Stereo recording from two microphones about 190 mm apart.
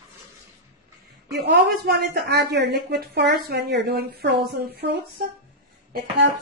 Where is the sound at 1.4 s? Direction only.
60° right (ahead or behind).